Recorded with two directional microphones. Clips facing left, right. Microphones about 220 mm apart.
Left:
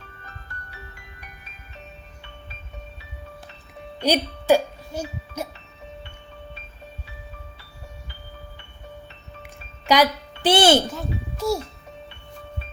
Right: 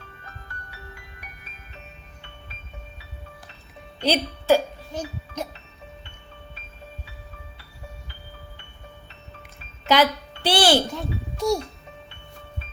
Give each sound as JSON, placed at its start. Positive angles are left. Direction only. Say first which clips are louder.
{"t": 4.0, "sound": "speech", "louder": "left 1 dB", "side_deg": 15}
{"t": 9.4, "sound": "a sound", "louder": "left 3 dB", "side_deg": 15}
{"t": 10.9, "sound": "a child's voice", "louder": "even", "side_deg": 5}